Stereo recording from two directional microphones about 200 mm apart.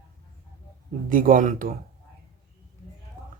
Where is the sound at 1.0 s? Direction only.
45° right (ahead or behind).